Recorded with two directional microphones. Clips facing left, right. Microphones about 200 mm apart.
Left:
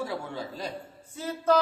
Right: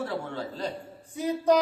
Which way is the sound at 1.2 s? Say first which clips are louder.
Right 2 dB; 15° right (ahead or behind).